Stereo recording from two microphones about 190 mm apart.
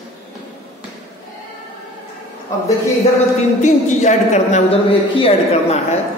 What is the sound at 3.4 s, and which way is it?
A woman's voice, 40° left (ahead or behind).